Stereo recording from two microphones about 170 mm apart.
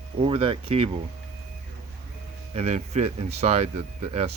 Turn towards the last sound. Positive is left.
turn(degrees=-35)  # may be behind; listen again after turning